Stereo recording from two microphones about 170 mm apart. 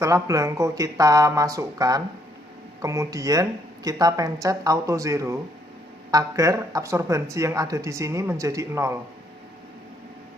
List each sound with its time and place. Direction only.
0.0 s speech: 20° right (ahead or behind)